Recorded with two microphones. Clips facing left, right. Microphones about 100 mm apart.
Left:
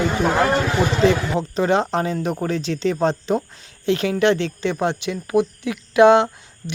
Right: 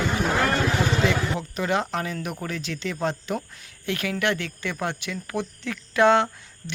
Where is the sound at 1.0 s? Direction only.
35° left (ahead or behind).